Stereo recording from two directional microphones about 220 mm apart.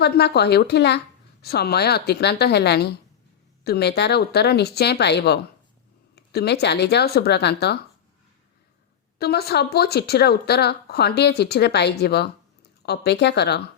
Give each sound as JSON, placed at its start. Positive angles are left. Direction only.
{"t": 0.0, "sound": "speech", "side_deg": 50}
{"t": 9.1, "sound": "speech", "side_deg": 45}